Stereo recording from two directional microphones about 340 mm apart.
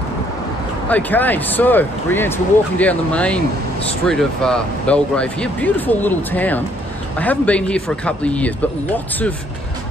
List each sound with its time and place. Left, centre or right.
0.8 s speech: centre